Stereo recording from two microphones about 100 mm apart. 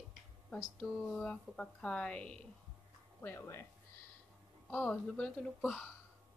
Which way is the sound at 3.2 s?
25° left (ahead or behind).